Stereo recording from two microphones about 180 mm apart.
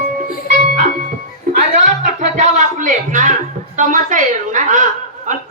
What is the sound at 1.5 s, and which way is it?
Music, 45° right (ahead or behind).